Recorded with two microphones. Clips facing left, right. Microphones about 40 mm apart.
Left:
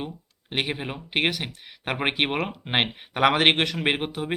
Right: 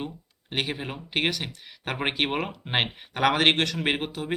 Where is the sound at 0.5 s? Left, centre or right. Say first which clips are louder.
Left 2 dB; centre.